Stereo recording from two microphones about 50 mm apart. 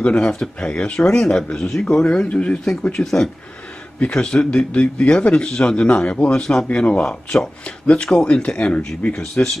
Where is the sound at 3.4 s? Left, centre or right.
Left.